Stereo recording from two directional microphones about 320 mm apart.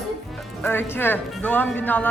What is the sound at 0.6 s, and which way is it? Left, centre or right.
A woman's voice, centre.